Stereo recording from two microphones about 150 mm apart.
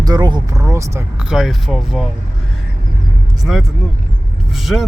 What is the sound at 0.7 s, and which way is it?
Speech, 20° right (ahead or behind).